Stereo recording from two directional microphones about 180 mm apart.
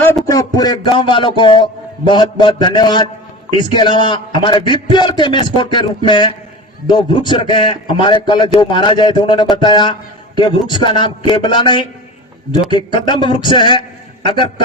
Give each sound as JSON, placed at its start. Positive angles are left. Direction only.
{"t": 0.3, "sound": "a man's voice", "side_deg": 20}